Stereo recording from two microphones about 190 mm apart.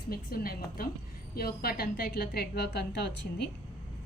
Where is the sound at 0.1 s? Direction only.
50° left (ahead or behind).